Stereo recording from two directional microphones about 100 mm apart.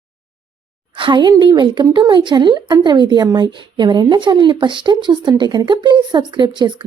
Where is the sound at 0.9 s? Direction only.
55° right (ahead or behind).